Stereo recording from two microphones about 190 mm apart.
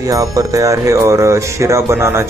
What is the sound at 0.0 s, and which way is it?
Speech, 20° right (ahead or behind).